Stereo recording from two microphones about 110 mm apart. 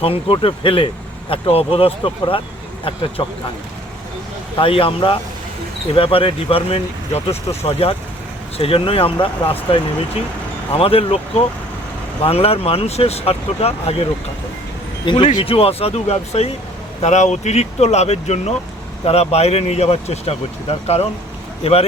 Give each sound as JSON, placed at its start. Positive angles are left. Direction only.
{"t": 0.0, "sound": "speech", "side_deg": 55}
{"t": 4.5, "sound": "speech", "side_deg": 55}
{"t": 10.7, "sound": "speech", "side_deg": 60}
{"t": 12.2, "sound": "speech", "side_deg": 65}
{"t": 15.0, "sound": "speech", "side_deg": 45}
{"t": 17.0, "sound": "speech", "side_deg": 90}